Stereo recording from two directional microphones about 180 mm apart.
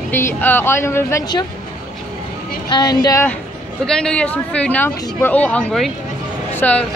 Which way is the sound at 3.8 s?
5° left (ahead or behind).